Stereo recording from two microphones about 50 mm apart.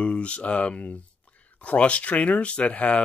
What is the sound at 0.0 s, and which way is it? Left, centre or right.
Speech, left.